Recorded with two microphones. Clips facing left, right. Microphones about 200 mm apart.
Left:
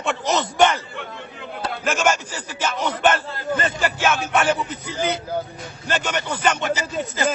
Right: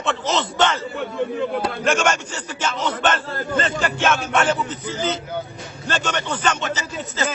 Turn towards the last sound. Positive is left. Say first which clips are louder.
# left 3 dB
turn(degrees=10)  # may be behind; listen again after turning